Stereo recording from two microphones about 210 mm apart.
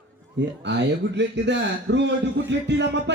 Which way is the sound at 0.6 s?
55° right (ahead or behind).